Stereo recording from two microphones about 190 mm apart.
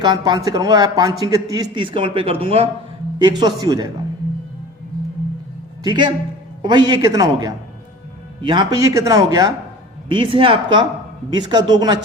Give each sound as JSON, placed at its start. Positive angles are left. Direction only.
{"t": 0.0, "sound": "a man's voice", "side_deg": -20}
{"t": 5.8, "sound": "a man's voice", "side_deg": -25}